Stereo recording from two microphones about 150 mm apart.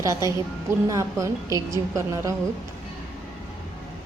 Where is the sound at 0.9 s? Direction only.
20° right (ahead or behind).